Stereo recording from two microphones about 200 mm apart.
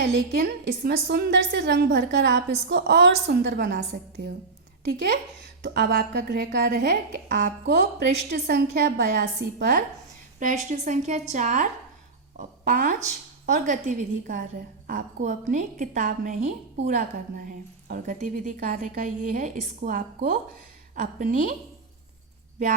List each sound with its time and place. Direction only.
0.0 s a woman's voice: 55° right (ahead or behind)
4.9 s a woman's voice: 55° right (ahead or behind)
10.4 s a woman's voice: 40° right (ahead or behind)